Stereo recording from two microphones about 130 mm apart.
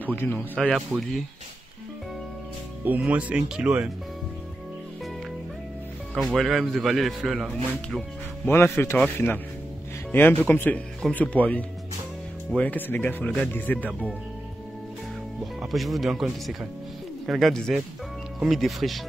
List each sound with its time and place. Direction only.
0.0 s speech: 15° left (ahead or behind)
0.6 s a man's voice: centre (ahead or behind)
3.0 s speech: 10° right (ahead or behind)
6.1 s a man's voice: centre (ahead or behind)
8.5 s speech: 15° left (ahead or behind)
15.6 s a man's voice: centre (ahead or behind)